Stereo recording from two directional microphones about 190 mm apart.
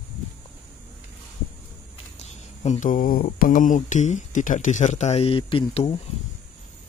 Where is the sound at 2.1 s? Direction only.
35° left (ahead or behind).